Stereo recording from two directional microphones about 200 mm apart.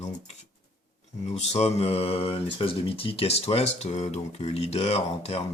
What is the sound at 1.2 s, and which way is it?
Speech, 30° left (ahead or behind).